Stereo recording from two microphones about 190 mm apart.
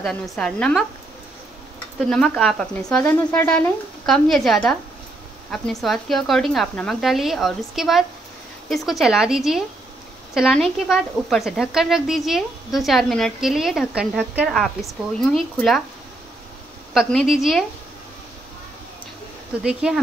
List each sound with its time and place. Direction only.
0.0 s speech: 5° left (ahead or behind)
2.0 s speech: 5° left (ahead or behind)
16.9 s speech: centre (ahead or behind)
19.6 s speech: 5° right (ahead or behind)